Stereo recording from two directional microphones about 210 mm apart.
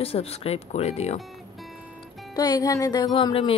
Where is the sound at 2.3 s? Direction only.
20° left (ahead or behind).